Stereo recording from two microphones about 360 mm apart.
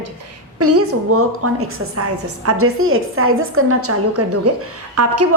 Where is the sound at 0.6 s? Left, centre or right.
Right.